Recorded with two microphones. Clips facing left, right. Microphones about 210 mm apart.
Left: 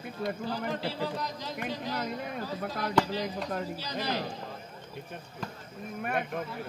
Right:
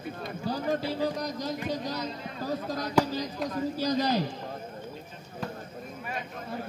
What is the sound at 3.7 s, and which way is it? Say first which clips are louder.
Speech: right 7 dB; 45° right (ahead or behind).